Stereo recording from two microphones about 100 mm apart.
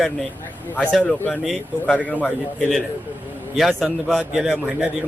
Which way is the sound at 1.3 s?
5° right (ahead or behind).